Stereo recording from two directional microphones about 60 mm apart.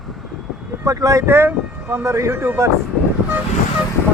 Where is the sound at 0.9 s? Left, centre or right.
Right.